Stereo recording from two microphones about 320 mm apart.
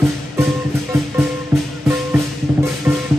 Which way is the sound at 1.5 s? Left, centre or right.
Centre.